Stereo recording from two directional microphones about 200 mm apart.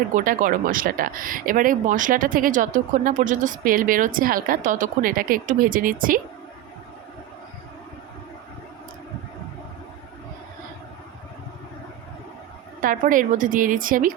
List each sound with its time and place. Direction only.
0.1 s speech: 40° right (ahead or behind)
12.8 s speech: 45° right (ahead or behind)